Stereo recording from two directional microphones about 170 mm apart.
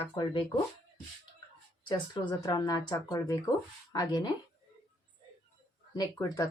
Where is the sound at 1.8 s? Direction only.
25° left (ahead or behind).